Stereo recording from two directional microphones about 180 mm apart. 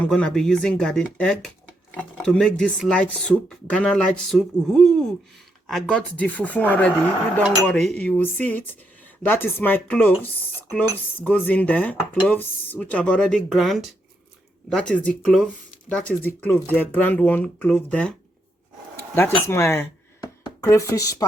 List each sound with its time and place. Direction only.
0.0 s speech: 5° left (ahead or behind)
11.2 s speech: 10° left (ahead or behind)
18.9 s a sound: 15° left (ahead or behind)
20.4 s speech: 15° left (ahead or behind)